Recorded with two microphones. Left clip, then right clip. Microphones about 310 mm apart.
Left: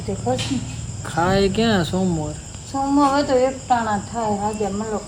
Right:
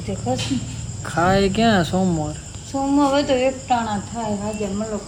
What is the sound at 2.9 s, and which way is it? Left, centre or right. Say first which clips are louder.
Speech: left 1 dB; right.